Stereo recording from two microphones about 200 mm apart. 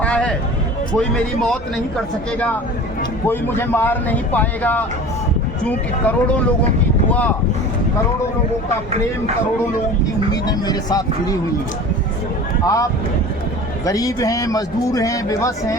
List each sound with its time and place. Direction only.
0.0 s a sound: 5° left (ahead or behind)
0.9 s a man's voice: 5° left (ahead or behind)
3.2 s a man's voice: 10° left (ahead or behind)
10.3 s speech: 20° left (ahead or behind)
12.6 s a man's voice: 15° left (ahead or behind)